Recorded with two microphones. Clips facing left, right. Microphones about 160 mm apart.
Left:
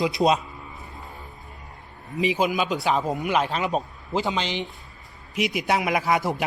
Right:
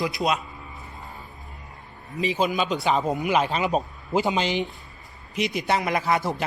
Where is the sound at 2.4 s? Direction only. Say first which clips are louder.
Even; 5° left (ahead or behind).